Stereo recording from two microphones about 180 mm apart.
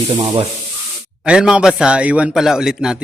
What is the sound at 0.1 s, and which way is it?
Sanding, 30° right (ahead or behind).